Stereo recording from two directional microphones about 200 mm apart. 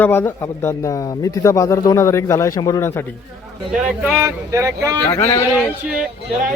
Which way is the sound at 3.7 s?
5° right (ahead or behind).